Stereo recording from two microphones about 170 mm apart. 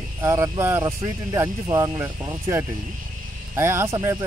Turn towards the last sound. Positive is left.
turn(degrees=-15)  # may be behind; listen again after turning